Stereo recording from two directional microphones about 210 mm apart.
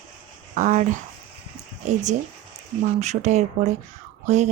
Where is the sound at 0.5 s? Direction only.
35° right (ahead or behind).